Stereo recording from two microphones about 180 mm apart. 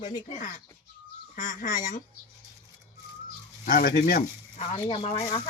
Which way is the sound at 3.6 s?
50° left (ahead or behind).